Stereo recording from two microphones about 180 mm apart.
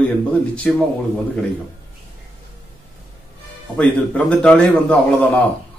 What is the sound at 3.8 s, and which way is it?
Speech, 5° left (ahead or behind).